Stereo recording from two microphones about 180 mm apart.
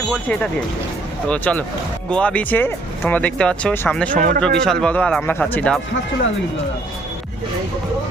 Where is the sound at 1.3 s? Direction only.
5° left (ahead or behind).